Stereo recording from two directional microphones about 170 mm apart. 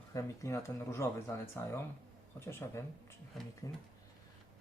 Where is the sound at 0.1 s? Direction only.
15° left (ahead or behind).